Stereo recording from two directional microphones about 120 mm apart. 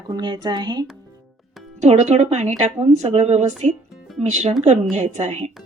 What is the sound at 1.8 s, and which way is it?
A woman's voice, 70° right (ahead or behind).